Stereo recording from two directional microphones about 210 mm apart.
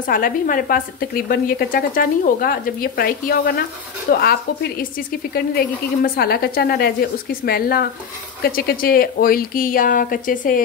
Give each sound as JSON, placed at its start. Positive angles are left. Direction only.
{"t": 0.0, "sound": "speech", "side_deg": 40}